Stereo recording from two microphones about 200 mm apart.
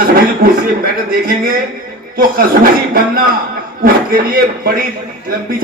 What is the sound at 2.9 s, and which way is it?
A man's voice, 45° right (ahead or behind).